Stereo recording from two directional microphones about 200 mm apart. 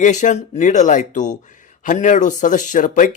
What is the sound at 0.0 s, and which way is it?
Speech, 35° left (ahead or behind).